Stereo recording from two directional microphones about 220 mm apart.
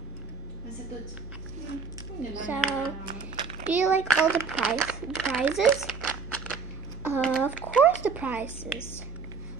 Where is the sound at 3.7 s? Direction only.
5° right (ahead or behind).